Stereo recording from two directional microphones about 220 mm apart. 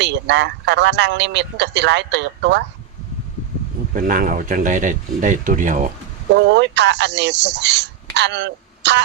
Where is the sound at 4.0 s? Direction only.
40° right (ahead or behind).